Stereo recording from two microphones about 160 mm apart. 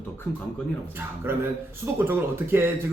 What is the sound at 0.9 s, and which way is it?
Speech, 15° right (ahead or behind).